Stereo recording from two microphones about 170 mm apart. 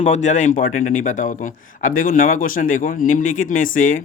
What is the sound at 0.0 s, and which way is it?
Speech, 45° left (ahead or behind).